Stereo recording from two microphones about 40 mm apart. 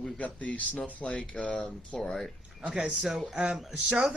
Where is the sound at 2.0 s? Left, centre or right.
Centre.